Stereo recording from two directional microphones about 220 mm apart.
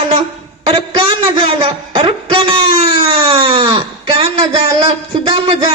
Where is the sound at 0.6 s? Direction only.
20° right (ahead or behind).